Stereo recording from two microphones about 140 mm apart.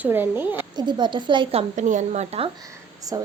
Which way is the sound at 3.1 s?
25° right (ahead or behind).